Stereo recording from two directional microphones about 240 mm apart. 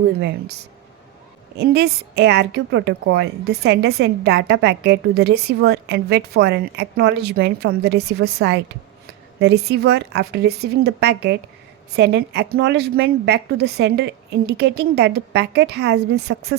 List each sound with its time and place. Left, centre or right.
0.2 s a woman's voice: right